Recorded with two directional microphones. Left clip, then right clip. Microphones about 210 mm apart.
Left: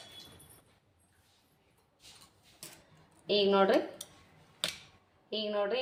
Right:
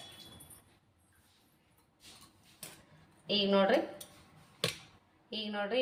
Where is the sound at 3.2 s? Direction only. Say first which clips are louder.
Left 2 dB; 40° left (ahead or behind).